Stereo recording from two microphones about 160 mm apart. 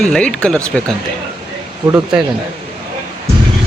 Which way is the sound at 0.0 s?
5° left (ahead or behind).